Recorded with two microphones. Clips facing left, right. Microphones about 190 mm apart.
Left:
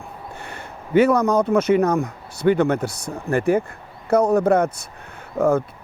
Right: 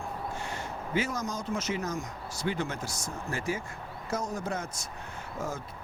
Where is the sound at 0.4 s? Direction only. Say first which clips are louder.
Left 1 dB; 60° left (ahead or behind).